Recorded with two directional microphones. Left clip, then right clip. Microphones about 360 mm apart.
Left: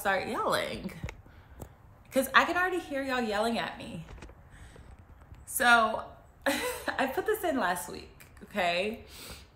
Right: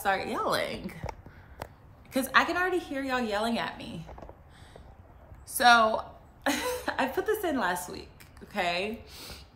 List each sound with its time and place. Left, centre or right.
0.0 s a woman's voice: centre
5.6 s a woman's voice: centre